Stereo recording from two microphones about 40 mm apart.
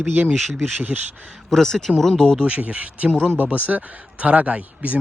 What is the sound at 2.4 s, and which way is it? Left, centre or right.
Speech, right.